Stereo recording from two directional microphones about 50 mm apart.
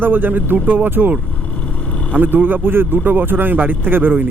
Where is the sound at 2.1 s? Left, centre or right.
Right.